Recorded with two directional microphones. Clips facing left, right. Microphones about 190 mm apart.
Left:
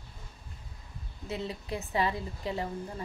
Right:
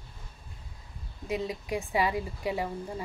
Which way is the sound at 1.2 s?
15° right (ahead or behind).